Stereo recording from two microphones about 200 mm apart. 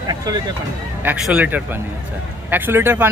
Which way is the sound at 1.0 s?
5° right (ahead or behind).